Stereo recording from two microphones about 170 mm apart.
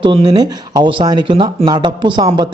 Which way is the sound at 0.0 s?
30° right (ahead or behind).